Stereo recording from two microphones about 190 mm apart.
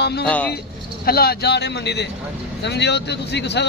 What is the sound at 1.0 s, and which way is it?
Speech, 55° left (ahead or behind).